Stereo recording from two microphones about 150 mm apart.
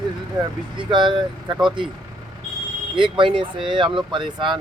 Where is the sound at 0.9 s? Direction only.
30° right (ahead or behind).